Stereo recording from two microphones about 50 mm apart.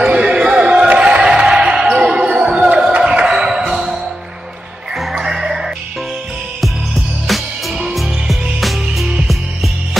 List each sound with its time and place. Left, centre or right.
0.0 s a sound: centre
3.0 s music: centre
7.2 s music: centre